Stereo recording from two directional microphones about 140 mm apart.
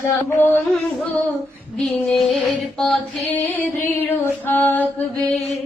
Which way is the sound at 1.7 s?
5° left (ahead or behind).